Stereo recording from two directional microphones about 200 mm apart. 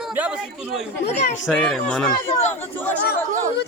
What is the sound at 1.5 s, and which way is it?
Speech, 5° left (ahead or behind).